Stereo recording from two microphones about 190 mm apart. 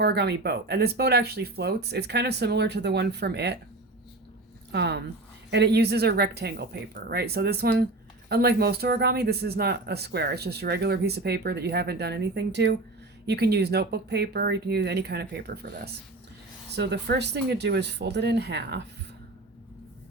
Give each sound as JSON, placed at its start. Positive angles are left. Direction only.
{"t": 0.0, "sound": "speech", "side_deg": -60}
{"t": 4.7, "sound": "speech", "side_deg": -60}